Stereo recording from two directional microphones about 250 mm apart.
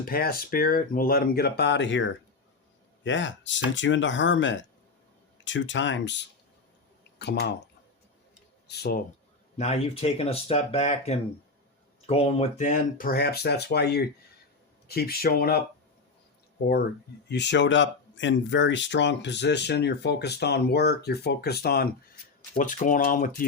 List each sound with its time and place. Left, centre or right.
0.0 s speech: left
8.6 s speech: left
9.6 s speech: left
17.2 s speech: left